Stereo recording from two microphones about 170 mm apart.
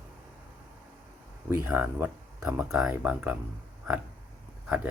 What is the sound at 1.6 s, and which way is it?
Speech, 10° right (ahead or behind).